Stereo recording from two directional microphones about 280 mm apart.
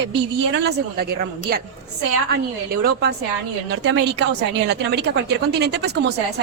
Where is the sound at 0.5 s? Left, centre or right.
Right.